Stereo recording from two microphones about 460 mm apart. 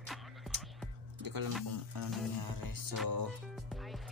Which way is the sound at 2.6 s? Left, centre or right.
Right.